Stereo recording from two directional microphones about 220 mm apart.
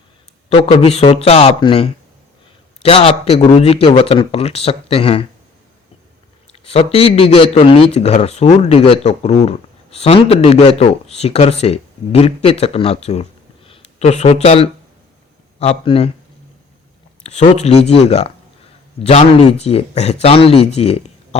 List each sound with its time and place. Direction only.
0.5 s a man's voice: 25° left (ahead or behind)
6.5 s a man's voice: 25° left (ahead or behind)
17.2 s a man's voice: 30° left (ahead or behind)